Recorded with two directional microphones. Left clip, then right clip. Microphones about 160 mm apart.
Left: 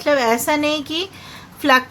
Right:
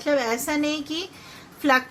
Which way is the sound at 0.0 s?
25° left (ahead or behind).